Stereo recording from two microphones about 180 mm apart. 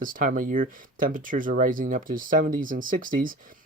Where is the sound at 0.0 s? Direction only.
50° right (ahead or behind).